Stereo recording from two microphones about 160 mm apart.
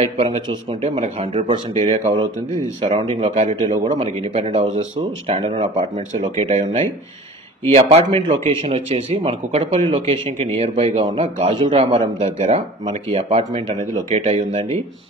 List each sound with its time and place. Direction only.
0.0 s speech: 40° right (ahead or behind)
6.2 s speech: 30° right (ahead or behind)
6.5 s speech: 45° right (ahead or behind)
12.4 s speech: 45° right (ahead or behind)